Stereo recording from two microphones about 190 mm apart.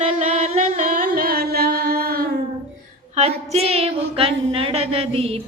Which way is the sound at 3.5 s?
30° right (ahead or behind).